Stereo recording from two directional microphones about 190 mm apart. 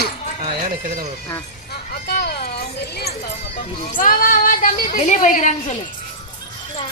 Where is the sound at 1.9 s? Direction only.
60° left (ahead or behind).